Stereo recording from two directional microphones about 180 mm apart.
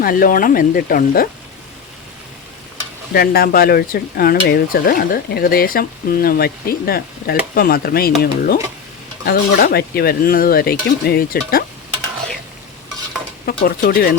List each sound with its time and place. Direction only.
0.0 s speech: 50° left (ahead or behind)
3.1 s speech: 55° left (ahead or behind)
13.4 s speech: 55° left (ahead or behind)